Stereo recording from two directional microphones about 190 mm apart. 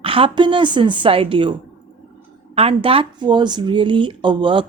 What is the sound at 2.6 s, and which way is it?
Speech, 30° right (ahead or behind).